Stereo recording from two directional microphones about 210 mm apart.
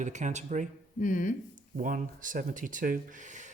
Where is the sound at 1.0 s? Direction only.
40° left (ahead or behind).